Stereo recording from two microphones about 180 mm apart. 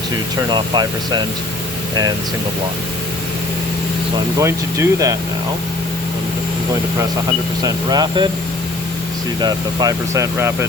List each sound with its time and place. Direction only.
0.4 s speech: 25° right (ahead or behind)
4.4 s speech: 15° right (ahead or behind)
7.6 s speech: 25° right (ahead or behind)
9.4 s speech: 20° right (ahead or behind)